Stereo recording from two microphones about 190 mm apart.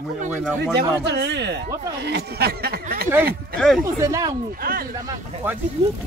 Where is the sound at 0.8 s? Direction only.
60° right (ahead or behind).